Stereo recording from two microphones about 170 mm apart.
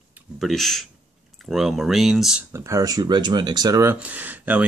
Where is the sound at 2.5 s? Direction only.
20° right (ahead or behind).